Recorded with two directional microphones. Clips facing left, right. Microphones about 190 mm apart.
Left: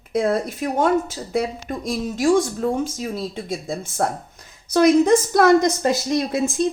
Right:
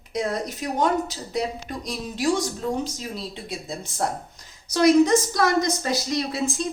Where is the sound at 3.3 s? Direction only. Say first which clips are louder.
Left 6 dB; 45° left (ahead or behind).